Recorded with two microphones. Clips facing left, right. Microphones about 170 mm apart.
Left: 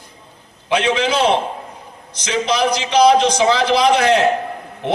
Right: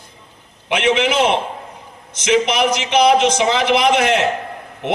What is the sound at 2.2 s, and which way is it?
A man's voice, 20° right (ahead or behind).